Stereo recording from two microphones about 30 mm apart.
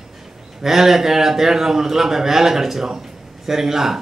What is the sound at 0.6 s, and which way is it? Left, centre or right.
A man's voice, centre.